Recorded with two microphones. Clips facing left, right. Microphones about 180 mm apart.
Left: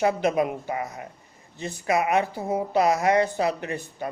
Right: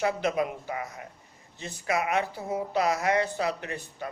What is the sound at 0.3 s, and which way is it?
Speech, 35° left (ahead or behind).